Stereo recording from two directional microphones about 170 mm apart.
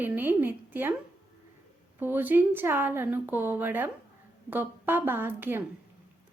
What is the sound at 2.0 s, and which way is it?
Speech, 10° right (ahead or behind).